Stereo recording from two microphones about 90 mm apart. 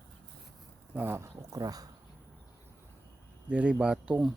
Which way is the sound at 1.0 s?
25° right (ahead or behind).